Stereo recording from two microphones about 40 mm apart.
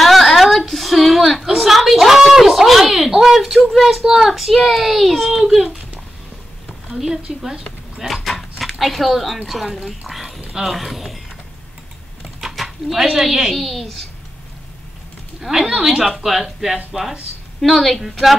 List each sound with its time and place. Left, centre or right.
0.0 s a sound: centre
3.2 s a child's voice: centre
4.0 s a woman's voice: centre
4.3 s a child's voice: centre
6.9 s a woman's voice: centre
8.1 s dog: centre
9.8 s a child's voice: centre
12.5 s speech: centre
15.5 s a child's voice: centre